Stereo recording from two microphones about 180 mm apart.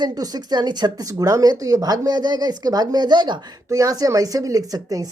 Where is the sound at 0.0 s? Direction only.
20° right (ahead or behind).